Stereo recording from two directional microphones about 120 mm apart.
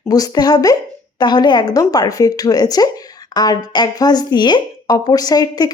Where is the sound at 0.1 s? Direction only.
30° left (ahead or behind).